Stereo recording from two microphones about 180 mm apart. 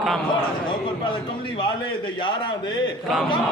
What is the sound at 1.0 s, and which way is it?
A man's voice, 30° left (ahead or behind).